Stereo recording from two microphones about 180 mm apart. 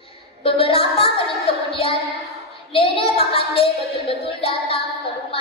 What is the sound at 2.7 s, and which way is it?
Child singing, 30° left (ahead or behind).